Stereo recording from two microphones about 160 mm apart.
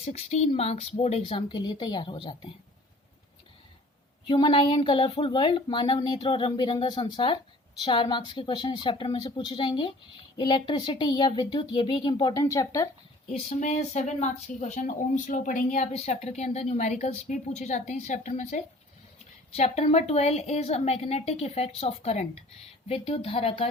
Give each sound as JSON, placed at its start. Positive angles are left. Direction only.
{"t": 0.0, "sound": "a woman's voice", "side_deg": 40}
{"t": 4.3, "sound": "speech", "side_deg": 30}
{"t": 13.5, "sound": "a woman's voice", "side_deg": 45}